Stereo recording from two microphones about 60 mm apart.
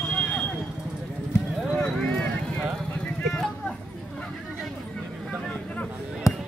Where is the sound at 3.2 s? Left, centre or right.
Centre.